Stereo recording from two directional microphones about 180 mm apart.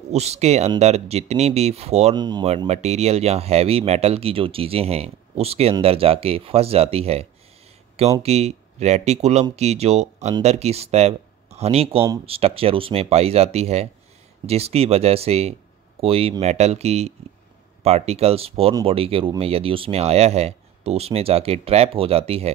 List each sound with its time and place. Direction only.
0.1 s speech: 35° right (ahead or behind)
2.1 s speech: 25° right (ahead or behind)
2.4 s speech: 35° right (ahead or behind)